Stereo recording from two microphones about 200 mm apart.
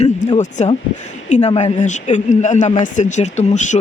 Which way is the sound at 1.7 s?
35° left (ahead or behind).